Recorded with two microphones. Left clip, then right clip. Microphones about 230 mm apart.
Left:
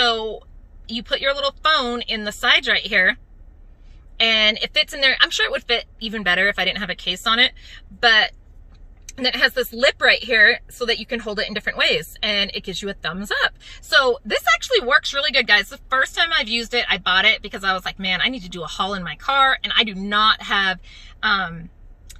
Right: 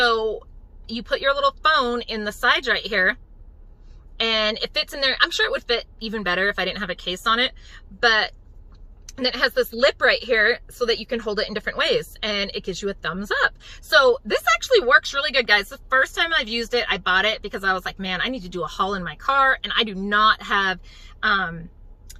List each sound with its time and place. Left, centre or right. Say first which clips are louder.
0.0 s a woman's voice: even; centre
4.2 s speech: left 5 dB; centre